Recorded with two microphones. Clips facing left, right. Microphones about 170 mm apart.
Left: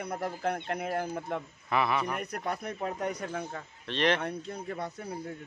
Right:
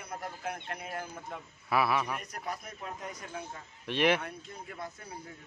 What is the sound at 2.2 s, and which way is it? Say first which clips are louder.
Speech: left 6 dB; 65° left (ahead or behind).